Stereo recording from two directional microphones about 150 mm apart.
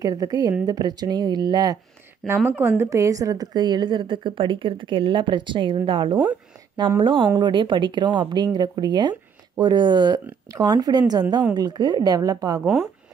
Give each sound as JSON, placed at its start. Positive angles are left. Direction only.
{"t": 0.0, "sound": "a woman's voice", "side_deg": -25}
{"t": 2.2, "sound": "a woman's voice", "side_deg": -15}